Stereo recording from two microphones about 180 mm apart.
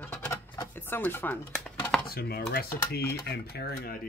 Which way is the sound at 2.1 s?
60° left (ahead or behind).